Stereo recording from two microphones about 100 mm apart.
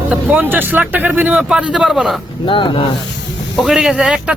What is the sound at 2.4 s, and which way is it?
Speech, 55° left (ahead or behind).